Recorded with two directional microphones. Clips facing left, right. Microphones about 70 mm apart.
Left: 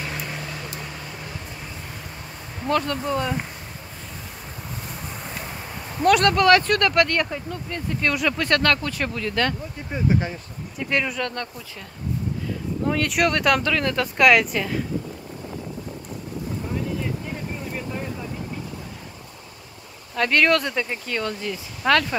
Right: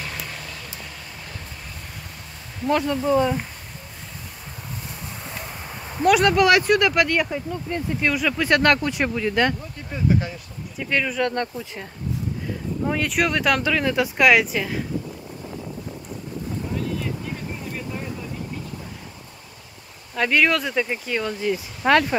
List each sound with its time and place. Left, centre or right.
0.2 s vehicle: centre
2.7 s speech: centre
5.2 s speech: centre
8.1 s speech: centre
8.5 s speech: right
9.9 s speech: left
10.8 s speech: centre
11.2 s speech: right
12.8 s speech: centre
20.2 s speech: centre